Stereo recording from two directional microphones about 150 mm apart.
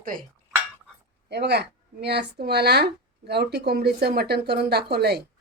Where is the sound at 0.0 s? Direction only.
70° right (ahead or behind).